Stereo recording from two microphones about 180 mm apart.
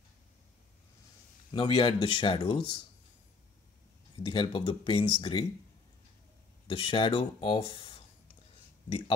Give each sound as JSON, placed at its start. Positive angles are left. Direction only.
{"t": 1.5, "sound": "speech", "side_deg": 25}
{"t": 4.2, "sound": "speech", "side_deg": 25}
{"t": 6.7, "sound": "speech", "side_deg": 30}